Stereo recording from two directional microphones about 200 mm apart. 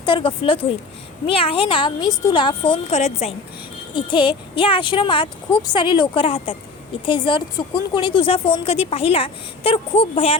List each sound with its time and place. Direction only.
0.0 s speech: 25° left (ahead or behind)